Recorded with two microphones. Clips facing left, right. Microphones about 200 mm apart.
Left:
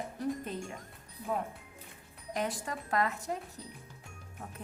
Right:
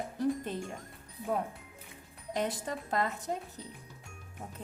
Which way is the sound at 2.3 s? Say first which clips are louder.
Right 2 dB; 25° right (ahead or behind).